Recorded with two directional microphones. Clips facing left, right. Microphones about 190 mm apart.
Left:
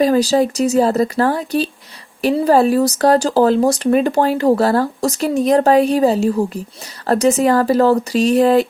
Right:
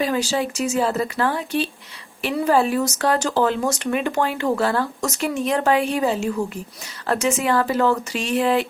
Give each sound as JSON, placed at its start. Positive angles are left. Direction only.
{"t": 0.0, "sound": "speech", "side_deg": 40}